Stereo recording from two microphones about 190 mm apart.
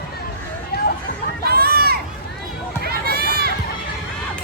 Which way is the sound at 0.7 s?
55° left (ahead or behind).